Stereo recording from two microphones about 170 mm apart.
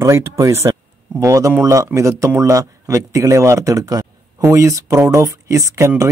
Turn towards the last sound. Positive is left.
turn(degrees=-15)  # may be behind; listen again after turning